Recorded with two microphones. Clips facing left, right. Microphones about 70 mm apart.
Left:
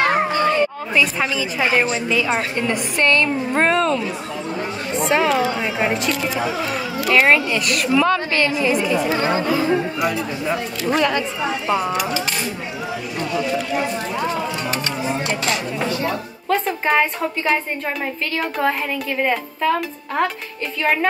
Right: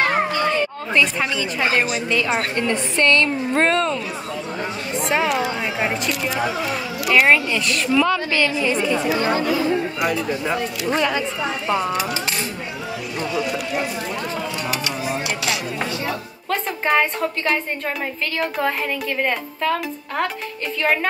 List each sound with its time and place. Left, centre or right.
0.0 s a sound: left
0.9 s a woman's voice: centre
9.1 s speech: left
10.9 s a woman's voice: centre
11.6 s speech: centre
15.2 s a sound: left
16.1 s a woman's voice: centre